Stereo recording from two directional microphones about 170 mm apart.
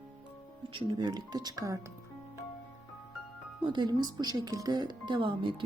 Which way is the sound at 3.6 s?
25° right (ahead or behind).